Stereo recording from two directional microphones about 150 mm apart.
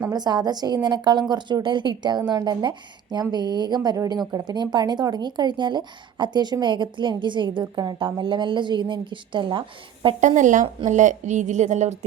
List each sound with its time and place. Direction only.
0.1 s a woman's voice: 25° right (ahead or behind)
10.2 s a woman's voice: 55° right (ahead or behind)